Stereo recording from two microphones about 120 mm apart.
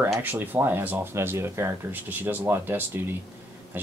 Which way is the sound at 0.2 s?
15° right (ahead or behind).